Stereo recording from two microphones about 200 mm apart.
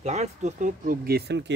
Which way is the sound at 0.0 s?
35° right (ahead or behind).